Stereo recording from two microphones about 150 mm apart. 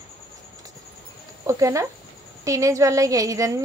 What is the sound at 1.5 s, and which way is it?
Speech, 20° right (ahead or behind).